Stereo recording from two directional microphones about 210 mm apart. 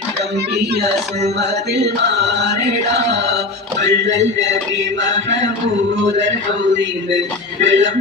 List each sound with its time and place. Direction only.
0.5 s speech: 50° right (ahead or behind)
1.4 s chant: 55° right (ahead or behind)
5.0 s mantra: 60° right (ahead or behind)
7.6 s mantra: 60° right (ahead or behind)